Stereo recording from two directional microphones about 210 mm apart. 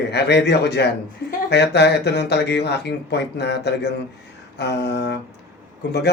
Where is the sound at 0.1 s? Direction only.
55° left (ahead or behind).